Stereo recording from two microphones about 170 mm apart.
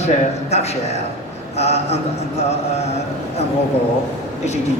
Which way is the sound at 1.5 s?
40° left (ahead or behind).